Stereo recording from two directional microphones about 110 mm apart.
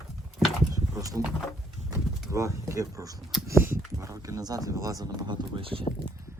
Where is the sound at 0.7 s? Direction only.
30° right (ahead or behind).